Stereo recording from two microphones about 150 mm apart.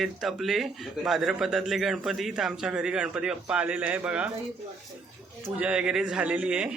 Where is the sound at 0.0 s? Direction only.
Centre (ahead or behind).